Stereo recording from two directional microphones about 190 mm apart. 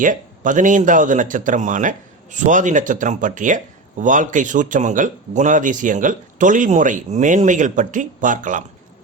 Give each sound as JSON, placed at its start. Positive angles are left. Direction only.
{"t": 0.0, "sound": "a man's voice", "side_deg": -45}